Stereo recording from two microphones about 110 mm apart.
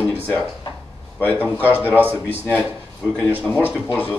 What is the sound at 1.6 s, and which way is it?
Speech, 15° right (ahead or behind).